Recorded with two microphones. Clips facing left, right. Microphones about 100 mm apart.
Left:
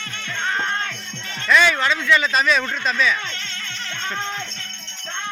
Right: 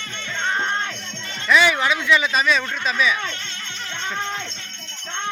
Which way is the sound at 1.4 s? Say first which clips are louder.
Even; 10° right (ahead or behind).